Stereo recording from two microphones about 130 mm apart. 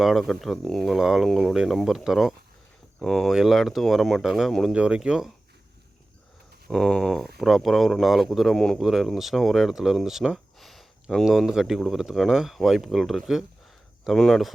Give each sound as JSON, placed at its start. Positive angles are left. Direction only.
{"t": 0.0, "sound": "speech", "side_deg": 0}
{"t": 6.7, "sound": "speech", "side_deg": 5}